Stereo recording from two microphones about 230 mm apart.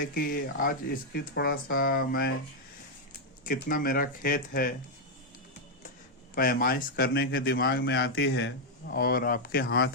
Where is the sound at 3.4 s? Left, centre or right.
Left.